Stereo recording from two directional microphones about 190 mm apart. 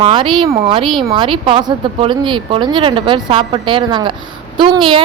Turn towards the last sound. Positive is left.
turn(degrees=-25)  # may be behind; listen again after turning